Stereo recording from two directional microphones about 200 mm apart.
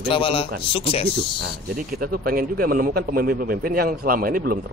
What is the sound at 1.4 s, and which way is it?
A man's voice, 50° right (ahead or behind).